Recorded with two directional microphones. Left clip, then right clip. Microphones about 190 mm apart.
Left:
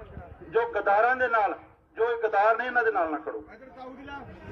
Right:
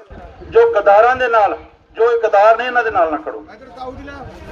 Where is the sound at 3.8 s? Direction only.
40° left (ahead or behind).